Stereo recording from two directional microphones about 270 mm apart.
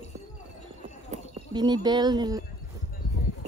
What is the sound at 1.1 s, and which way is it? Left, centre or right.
Speech, centre.